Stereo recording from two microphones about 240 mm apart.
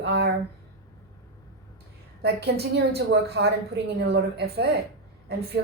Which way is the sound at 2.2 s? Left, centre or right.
Right.